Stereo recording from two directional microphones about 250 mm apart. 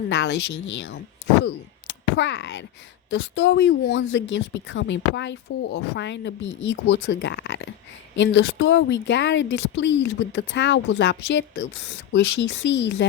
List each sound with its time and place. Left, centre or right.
0.1 s a woman's voice: left
2.1 s a woman's voice: left